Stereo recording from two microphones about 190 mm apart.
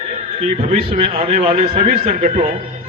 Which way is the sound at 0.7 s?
35° right (ahead or behind).